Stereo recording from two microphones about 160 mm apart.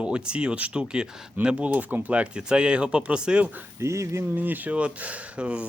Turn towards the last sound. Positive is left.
turn(degrees=-5)  # may be behind; listen again after turning